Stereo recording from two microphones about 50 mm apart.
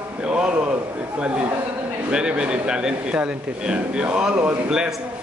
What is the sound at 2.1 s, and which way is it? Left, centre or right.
Speech, centre.